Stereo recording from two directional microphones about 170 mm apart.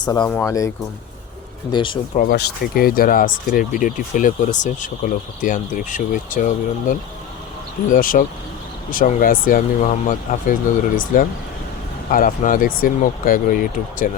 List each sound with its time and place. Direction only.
0.0 s speech: 25° left (ahead or behind)
0.3 s speech: 10° left (ahead or behind)
1.7 s speech: 30° left (ahead or behind)
2.1 s speech: 65° left (ahead or behind)